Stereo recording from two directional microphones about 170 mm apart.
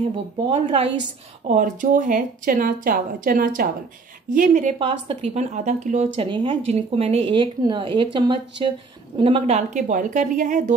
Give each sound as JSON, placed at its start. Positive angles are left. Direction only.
{"t": 0.5, "sound": "a woman's voice", "side_deg": -30}
{"t": 1.5, "sound": "a woman's voice", "side_deg": -50}
{"t": 4.7, "sound": "a woman's voice", "side_deg": -30}
{"t": 6.1, "sound": "a woman's voice", "side_deg": -30}